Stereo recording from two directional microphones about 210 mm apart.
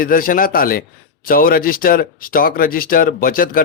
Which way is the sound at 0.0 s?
40° left (ahead or behind).